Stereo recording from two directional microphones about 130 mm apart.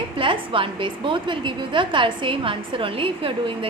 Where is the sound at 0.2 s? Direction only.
40° right (ahead or behind).